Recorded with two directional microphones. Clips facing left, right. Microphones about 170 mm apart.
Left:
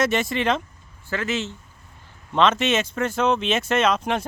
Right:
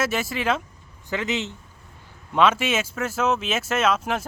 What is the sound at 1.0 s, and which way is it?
A man's voice, 20° right (ahead or behind).